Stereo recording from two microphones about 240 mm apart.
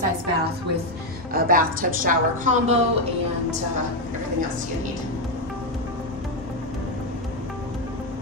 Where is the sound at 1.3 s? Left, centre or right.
Right.